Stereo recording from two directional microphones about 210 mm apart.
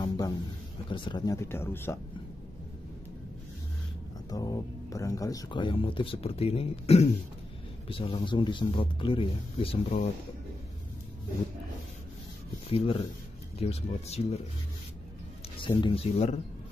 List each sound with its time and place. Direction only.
0.8 s speech: 20° left (ahead or behind)
4.3 s speech: 15° left (ahead or behind)
12.6 s speech: 25° left (ahead or behind)
15.6 s speech: 25° left (ahead or behind)